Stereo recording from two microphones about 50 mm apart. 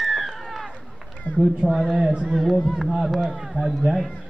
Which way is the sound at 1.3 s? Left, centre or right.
Left.